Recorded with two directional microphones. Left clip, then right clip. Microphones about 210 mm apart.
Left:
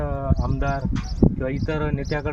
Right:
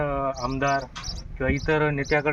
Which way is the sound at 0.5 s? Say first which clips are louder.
Right 3 dB; 15° left (ahead or behind).